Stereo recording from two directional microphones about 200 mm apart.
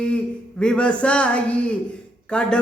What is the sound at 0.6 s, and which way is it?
Speech, 5° left (ahead or behind).